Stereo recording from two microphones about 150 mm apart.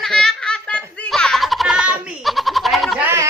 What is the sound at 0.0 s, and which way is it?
Baby laughter, centre (ahead or behind).